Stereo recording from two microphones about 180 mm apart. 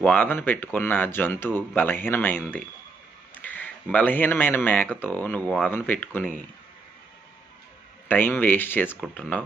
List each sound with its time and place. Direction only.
0.0 s speech: 10° left (ahead or behind)
8.0 s speech: 10° left (ahead or behind)